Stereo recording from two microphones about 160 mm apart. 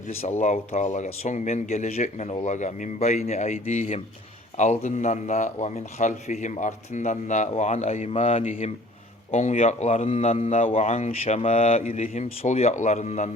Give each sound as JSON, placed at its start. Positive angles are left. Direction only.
{"t": 0.2, "sound": "speech", "side_deg": 45}